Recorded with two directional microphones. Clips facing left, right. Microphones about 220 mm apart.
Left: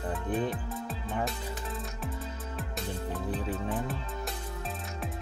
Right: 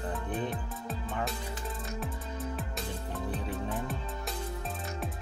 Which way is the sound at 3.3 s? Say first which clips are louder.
Left 2 dB; centre (ahead or behind).